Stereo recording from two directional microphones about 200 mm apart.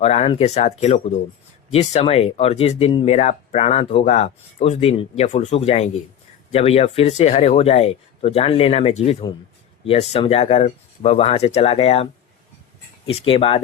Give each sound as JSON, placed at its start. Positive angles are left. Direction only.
{"t": 0.0, "sound": "speech", "side_deg": 30}
{"t": 13.1, "sound": "speech", "side_deg": 30}